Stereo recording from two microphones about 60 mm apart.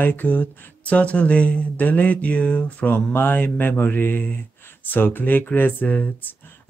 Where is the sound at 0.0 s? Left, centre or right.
Left.